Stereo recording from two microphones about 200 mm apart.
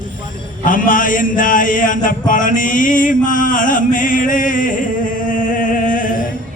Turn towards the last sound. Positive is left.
turn(degrees=40)  # may be behind; listen again after turning